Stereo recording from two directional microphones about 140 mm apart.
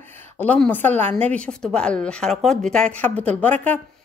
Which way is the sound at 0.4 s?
10° left (ahead or behind).